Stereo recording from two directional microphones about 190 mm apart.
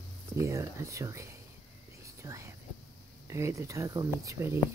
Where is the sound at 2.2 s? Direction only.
15° right (ahead or behind).